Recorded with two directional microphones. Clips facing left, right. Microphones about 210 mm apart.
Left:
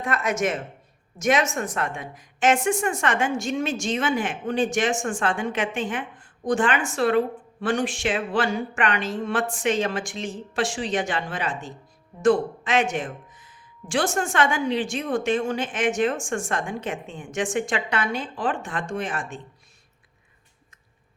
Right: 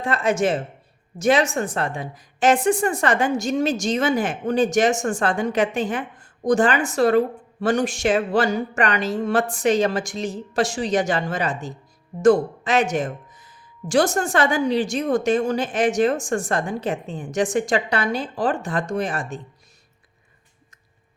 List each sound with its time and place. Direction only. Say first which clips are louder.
0.0 s a woman's voice: right 4 dB; 30° right (ahead or behind)